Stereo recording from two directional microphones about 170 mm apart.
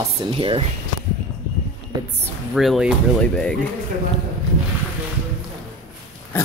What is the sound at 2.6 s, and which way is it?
Speech, centre (ahead or behind).